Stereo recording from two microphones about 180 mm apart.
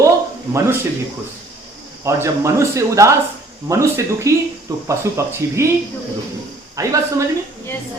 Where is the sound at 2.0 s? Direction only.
15° right (ahead or behind).